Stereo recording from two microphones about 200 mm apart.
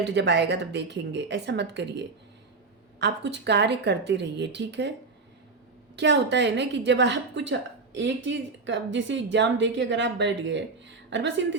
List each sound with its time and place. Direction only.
0.0 s speech: 60° right (ahead or behind)
6.0 s a woman's voice: 60° right (ahead or behind)